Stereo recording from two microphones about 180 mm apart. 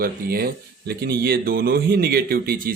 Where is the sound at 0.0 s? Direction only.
55° right (ahead or behind).